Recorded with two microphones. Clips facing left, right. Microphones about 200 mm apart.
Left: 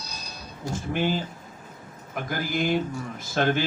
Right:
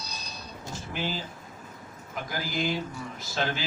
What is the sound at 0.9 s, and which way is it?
Speech, 55° left (ahead or behind).